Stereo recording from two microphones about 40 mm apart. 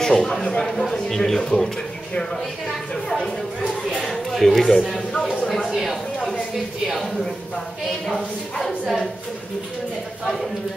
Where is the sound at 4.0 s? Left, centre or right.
Centre.